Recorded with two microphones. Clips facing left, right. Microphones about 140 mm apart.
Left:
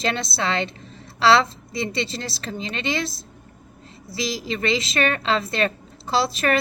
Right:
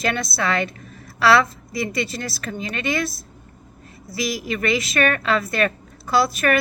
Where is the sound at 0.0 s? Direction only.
25° left (ahead or behind).